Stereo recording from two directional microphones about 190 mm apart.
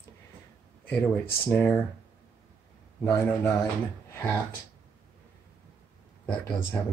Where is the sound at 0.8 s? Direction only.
10° left (ahead or behind).